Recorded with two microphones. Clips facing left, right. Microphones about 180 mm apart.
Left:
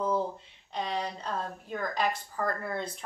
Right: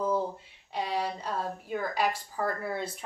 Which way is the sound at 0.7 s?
10° right (ahead or behind).